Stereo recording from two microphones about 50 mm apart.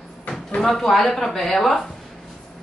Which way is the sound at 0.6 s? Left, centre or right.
Centre.